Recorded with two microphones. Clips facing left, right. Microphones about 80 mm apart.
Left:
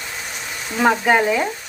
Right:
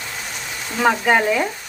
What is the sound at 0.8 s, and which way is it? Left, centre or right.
Speech, centre.